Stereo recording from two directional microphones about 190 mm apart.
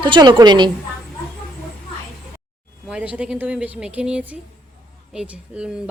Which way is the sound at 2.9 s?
5° right (ahead or behind).